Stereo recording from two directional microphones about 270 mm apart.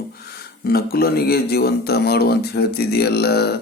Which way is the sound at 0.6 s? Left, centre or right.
Left.